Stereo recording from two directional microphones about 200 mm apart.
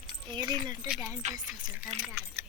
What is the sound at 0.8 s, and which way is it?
Music, 5° right (ahead or behind).